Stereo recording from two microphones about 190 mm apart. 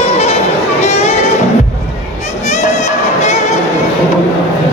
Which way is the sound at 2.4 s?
40° left (ahead or behind).